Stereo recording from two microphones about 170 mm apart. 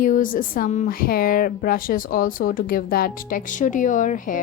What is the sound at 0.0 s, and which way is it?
Speech, 50° left (ahead or behind).